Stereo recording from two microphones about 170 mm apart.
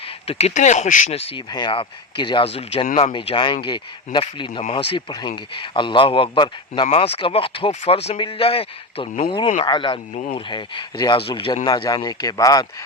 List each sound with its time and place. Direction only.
0.3 s speech: 35° left (ahead or behind)
3.1 s speech: 30° left (ahead or behind)
6.8 s speech: 40° left (ahead or behind)
10.2 s speech: 45° left (ahead or behind)
10.5 s speech: 25° left (ahead or behind)